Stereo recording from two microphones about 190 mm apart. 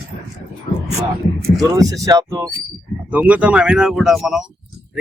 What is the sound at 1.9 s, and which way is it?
Speech, 15° right (ahead or behind).